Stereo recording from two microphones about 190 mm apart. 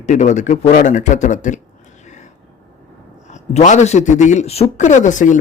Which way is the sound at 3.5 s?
40° left (ahead or behind).